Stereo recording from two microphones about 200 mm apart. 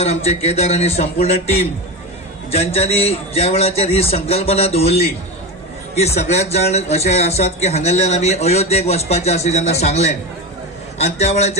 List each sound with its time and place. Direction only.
0.0 s a man's voice: 30° left (ahead or behind)